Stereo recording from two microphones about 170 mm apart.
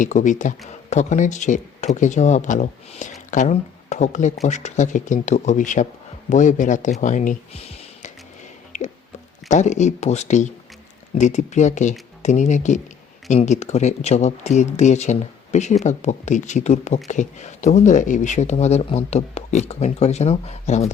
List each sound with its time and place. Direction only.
0.0 s speech: 45° left (ahead or behind)
8.7 s music: 45° left (ahead or behind)
9.5 s speech: 45° left (ahead or behind)